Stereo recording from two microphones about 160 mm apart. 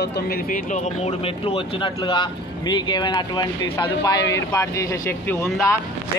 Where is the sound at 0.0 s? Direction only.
80° left.